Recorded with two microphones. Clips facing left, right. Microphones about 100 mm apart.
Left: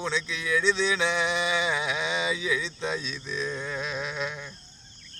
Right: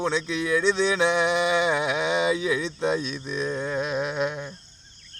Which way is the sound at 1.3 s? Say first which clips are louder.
Right 5 dB; 55° right (ahead or behind).